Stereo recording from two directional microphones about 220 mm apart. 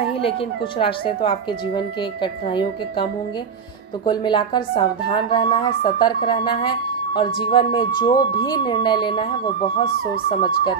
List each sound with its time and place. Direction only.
0.7 s speech: 25° left (ahead or behind)